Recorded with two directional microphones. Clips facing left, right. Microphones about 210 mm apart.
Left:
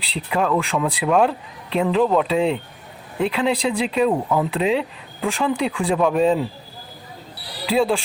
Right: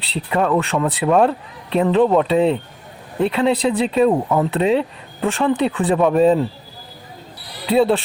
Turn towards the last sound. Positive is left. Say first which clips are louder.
# right 4 dB
turn(degrees=0)  # may be behind; listen again after turning